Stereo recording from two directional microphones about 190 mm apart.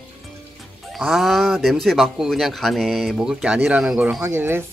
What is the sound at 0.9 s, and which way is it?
Speech, centre (ahead or behind).